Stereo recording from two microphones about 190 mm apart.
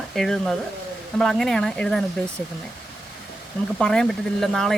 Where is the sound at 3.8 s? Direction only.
5° left (ahead or behind).